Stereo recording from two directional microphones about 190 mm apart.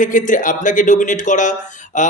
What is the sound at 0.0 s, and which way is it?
Speech, 45° left (ahead or behind).